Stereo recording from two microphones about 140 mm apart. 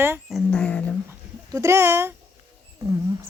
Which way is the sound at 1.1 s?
20° right (ahead or behind).